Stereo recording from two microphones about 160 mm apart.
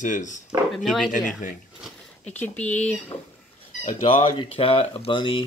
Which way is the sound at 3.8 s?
30° left (ahead or behind).